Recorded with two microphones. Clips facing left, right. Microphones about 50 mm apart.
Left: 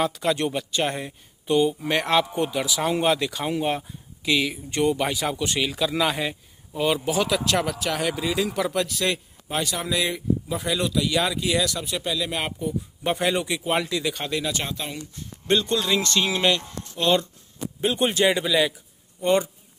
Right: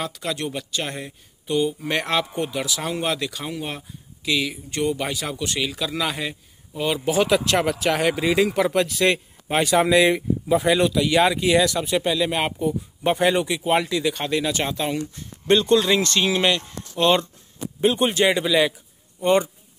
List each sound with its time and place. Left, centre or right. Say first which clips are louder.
0.0 s speech: left 4 dB; centre
7.2 s speech: right 3 dB; centre
14.6 s speech: right 7 dB; right
17.7 s speech: right 3 dB; centre